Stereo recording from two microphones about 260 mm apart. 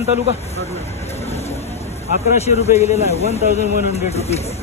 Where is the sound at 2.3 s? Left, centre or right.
Left.